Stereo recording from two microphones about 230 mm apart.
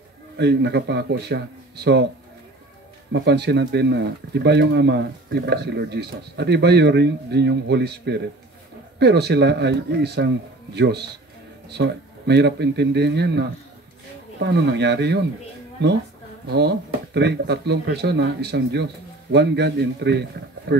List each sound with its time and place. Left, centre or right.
0.4 s speech: right
3.1 s speech: right